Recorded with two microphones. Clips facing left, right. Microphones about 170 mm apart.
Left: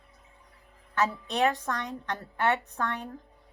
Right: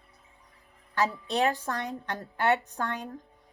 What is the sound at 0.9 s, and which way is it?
A woman's voice, 35° right (ahead or behind).